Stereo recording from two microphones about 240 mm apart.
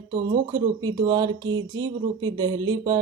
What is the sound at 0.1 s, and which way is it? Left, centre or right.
Speech, centre.